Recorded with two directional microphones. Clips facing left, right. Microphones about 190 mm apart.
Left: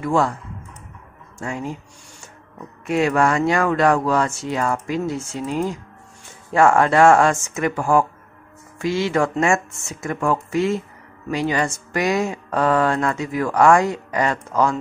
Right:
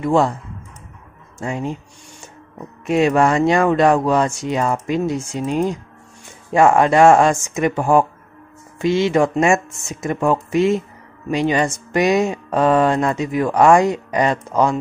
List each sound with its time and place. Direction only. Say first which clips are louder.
0.0 s speech: right 3 dB; 20° right (ahead or behind)
1.4 s speech: right 3 dB; 20° right (ahead or behind)